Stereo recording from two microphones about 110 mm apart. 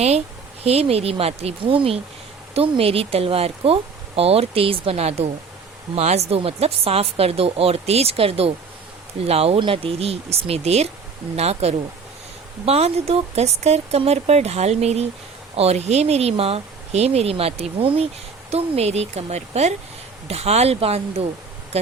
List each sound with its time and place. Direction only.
0.6 s speech: 70° right (ahead or behind)
9.6 s speech: 55° right (ahead or behind)
18.5 s speech: 70° right (ahead or behind)
20.2 s speech: 70° right (ahead or behind)